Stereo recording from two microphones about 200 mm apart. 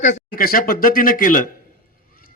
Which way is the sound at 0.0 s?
40° left (ahead or behind).